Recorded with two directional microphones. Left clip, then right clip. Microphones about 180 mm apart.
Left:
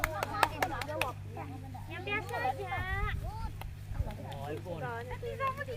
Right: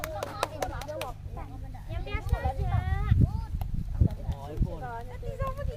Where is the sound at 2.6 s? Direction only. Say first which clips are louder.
Left 1 dB; 85° right.